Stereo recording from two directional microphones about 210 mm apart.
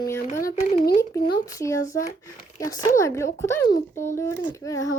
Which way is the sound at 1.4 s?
15° left (ahead or behind).